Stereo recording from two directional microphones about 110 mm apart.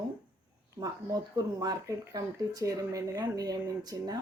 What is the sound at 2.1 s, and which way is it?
Speech, 30° right (ahead or behind).